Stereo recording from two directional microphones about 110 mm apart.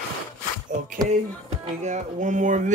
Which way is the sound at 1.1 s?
90° right.